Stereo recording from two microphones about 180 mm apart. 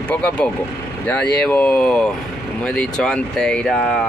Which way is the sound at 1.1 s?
5° left (ahead or behind).